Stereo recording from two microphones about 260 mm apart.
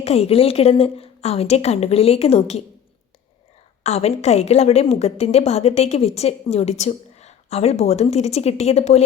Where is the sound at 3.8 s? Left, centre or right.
Left.